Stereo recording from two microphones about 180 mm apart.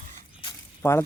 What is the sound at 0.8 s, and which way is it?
Speech, 15° left (ahead or behind).